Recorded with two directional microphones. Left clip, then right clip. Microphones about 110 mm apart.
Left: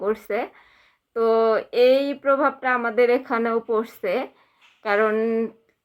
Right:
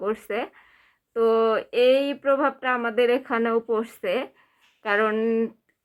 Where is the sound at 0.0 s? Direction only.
35° right (ahead or behind).